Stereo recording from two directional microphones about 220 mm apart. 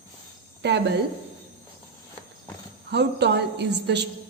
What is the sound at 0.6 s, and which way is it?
Speech, 50° right (ahead or behind).